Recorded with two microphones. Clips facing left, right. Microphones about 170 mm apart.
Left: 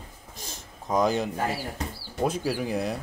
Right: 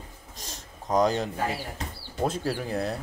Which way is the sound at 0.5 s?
5° left (ahead or behind).